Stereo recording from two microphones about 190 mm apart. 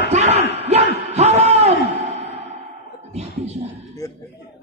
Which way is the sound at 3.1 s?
35° right (ahead or behind).